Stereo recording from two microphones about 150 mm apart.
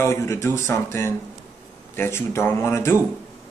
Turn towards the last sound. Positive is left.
turn(degrees=15)  # may be behind; listen again after turning